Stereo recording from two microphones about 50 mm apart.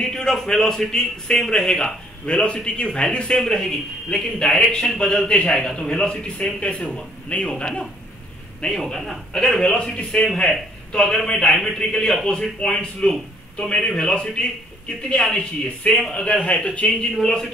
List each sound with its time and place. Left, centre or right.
0.0 s a man's voice: centre
8.6 s a man's voice: centre
15.9 s a man's voice: centre
16.3 s a man's voice: left
16.8 s a man's voice: centre